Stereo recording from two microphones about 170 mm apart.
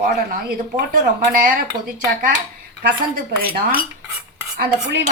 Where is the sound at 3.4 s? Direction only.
60° right (ahead or behind).